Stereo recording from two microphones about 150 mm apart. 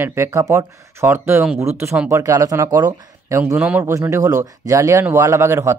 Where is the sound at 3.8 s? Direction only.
20° right (ahead or behind).